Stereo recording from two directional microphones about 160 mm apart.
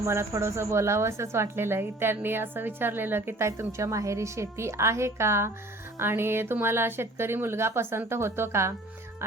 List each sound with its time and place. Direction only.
0.0 s a woman's voice: 15° right (ahead or behind)